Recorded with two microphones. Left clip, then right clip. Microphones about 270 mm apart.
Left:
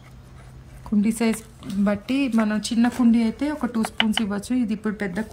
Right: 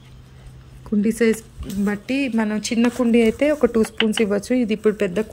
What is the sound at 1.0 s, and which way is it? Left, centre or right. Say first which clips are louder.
Speech: right 6 dB; centre.